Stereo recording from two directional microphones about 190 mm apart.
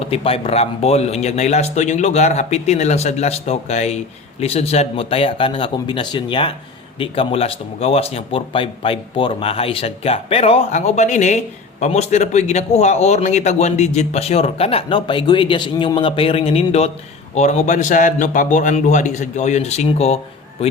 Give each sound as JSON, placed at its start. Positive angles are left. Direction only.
{"t": 0.0, "sound": "speech", "side_deg": 30}